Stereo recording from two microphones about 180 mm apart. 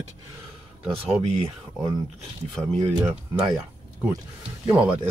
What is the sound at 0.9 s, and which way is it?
Speech, 35° right (ahead or behind).